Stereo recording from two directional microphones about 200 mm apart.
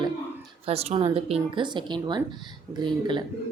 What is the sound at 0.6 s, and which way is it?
A woman's voice, 30° right (ahead or behind).